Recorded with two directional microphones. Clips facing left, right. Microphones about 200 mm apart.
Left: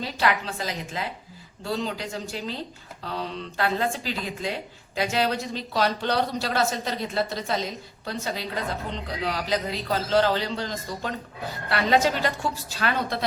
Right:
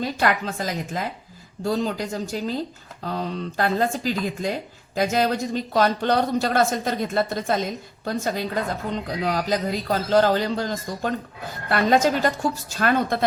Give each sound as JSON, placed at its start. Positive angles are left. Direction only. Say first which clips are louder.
{"t": 0.0, "sound": "speech", "louder": "right 3 dB", "side_deg": -50}